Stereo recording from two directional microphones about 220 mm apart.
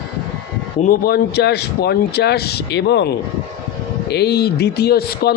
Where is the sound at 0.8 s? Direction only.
40° left (ahead or behind).